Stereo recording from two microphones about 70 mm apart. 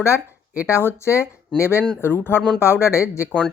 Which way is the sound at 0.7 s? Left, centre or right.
Left.